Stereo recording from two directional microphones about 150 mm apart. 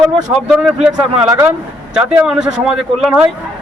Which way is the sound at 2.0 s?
5° right (ahead or behind).